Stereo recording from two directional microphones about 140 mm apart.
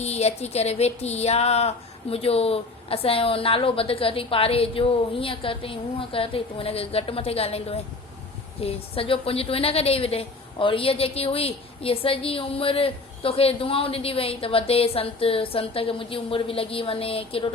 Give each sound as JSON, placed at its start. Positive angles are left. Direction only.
{"t": 0.0, "sound": "a woman's voice", "side_deg": 50}